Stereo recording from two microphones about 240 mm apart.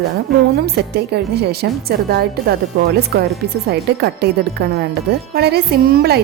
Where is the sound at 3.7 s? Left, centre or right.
Right.